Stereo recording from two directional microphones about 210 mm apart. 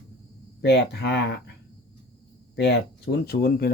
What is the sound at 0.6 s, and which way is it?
Speech, 55° left (ahead or behind).